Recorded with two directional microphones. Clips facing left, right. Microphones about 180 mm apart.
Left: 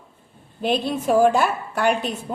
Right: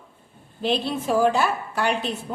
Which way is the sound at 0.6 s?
50° left (ahead or behind).